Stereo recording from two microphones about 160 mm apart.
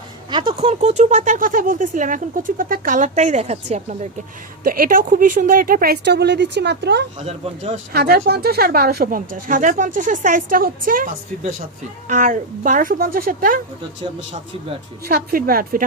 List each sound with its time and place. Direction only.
0.3 s speech: 30° right (ahead or behind)
4.6 s speech: 60° right (ahead or behind); by 7.0 s 90° right
7.2 s speech: 40° right (ahead or behind)
7.9 s speech: 70° right (ahead or behind)
15.0 s a woman's voice: 65° right (ahead or behind)